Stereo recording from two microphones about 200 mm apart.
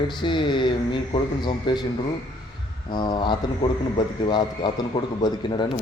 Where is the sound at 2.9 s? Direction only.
25° left (ahead or behind).